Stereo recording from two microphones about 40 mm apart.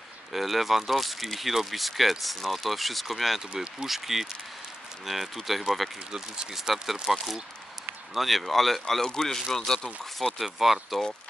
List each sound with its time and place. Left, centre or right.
0.3 s speech: centre
6.1 s speech: centre
6.5 s speech: centre
8.1 s speech: centre
9.0 s speech: centre
10.4 s speech: centre